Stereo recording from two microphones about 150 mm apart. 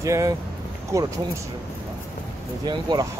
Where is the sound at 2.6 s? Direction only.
30° right (ahead or behind).